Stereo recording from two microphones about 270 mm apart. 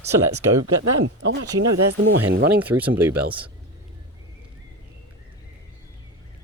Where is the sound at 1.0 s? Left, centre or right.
Right.